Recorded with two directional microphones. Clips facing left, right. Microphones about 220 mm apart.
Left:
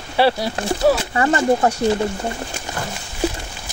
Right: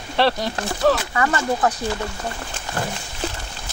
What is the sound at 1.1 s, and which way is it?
Speech, 30° left (ahead or behind).